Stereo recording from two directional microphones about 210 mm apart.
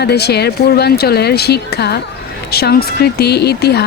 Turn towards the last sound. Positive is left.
turn(degrees=50)  # may be behind; listen again after turning